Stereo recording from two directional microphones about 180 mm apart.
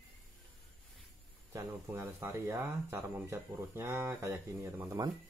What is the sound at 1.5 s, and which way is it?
Speech, 15° right (ahead or behind).